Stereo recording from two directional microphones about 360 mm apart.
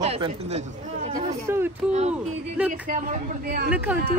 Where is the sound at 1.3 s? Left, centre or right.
Centre.